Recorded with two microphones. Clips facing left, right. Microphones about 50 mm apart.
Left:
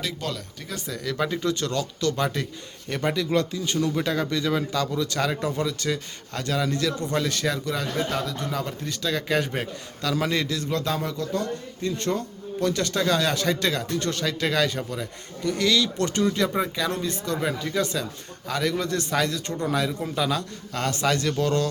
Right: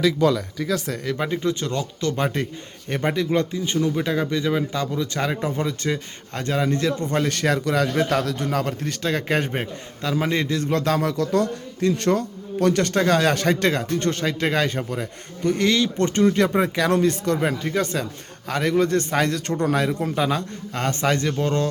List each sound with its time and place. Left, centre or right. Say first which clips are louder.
1.0 s speech: left 1 dB; right
7.6 s a man's voice: right 6 dB; right
9.5 s a man's voice: right 2 dB; right
16.6 s a man's voice: right 6 dB; right